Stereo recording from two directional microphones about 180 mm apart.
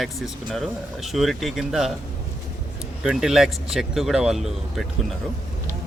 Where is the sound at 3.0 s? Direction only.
5° right (ahead or behind).